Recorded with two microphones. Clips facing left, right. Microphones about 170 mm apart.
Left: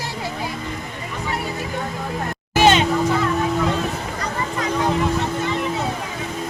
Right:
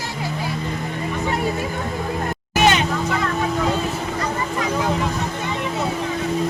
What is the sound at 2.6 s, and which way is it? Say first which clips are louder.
Vehicle: left 2 dB; 25° left (ahead or behind).